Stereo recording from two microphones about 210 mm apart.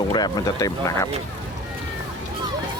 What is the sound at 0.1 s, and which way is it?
Speech, 20° left (ahead or behind).